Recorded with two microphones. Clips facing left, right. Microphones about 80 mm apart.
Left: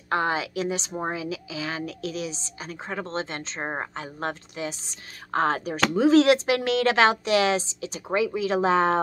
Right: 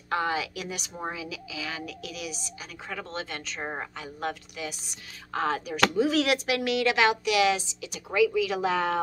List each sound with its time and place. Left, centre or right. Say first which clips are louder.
0.1 s a woman's voice: left 3 dB; left